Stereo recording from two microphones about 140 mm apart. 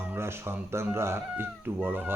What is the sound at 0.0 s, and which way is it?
Speech, 15° right (ahead or behind).